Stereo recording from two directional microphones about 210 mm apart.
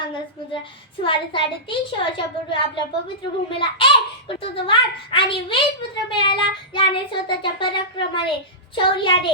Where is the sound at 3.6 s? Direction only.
25° left (ahead or behind).